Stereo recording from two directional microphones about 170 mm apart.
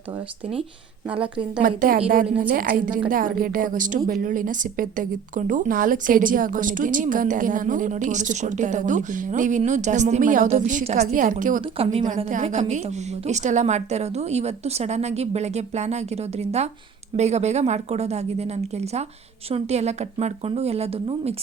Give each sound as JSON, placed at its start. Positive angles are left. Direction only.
{"t": 1.0, "sound": "a woman's voice", "side_deg": -10}
{"t": 1.6, "sound": "a woman's voice", "side_deg": -55}
{"t": 2.2, "sound": "a woman's voice", "side_deg": -10}
{"t": 2.5, "sound": "a woman's voice", "side_deg": -55}
{"t": 11.6, "sound": "a woman's voice", "side_deg": -35}
{"t": 12.0, "sound": "a woman's voice", "side_deg": -50}